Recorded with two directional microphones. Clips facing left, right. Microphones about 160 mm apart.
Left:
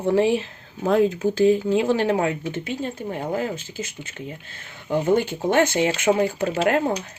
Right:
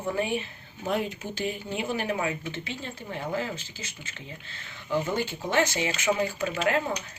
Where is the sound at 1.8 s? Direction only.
90° left.